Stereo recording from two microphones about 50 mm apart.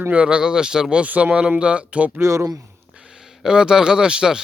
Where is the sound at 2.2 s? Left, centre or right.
Right.